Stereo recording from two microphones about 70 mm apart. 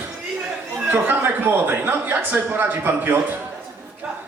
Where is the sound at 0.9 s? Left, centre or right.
Right.